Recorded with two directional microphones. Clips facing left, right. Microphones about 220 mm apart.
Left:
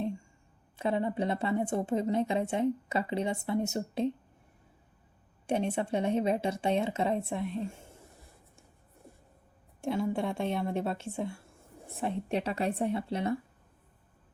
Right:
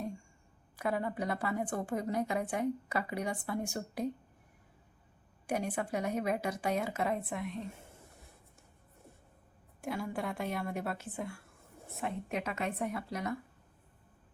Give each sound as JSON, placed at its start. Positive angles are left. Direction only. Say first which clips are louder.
{"t": 0.8, "sound": "a woman's voice", "louder": "left 4 dB", "side_deg": 25}
{"t": 5.5, "sound": "a woman's voice", "louder": "left 5 dB", "side_deg": 25}
{"t": 9.8, "sound": "a woman's voice", "louder": "left 6 dB", "side_deg": 25}